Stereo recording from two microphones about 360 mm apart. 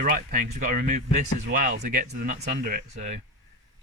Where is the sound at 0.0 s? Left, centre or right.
Right.